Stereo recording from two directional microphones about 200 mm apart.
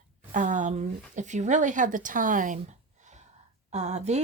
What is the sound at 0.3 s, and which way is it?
A woman's voice, 40° right (ahead or behind).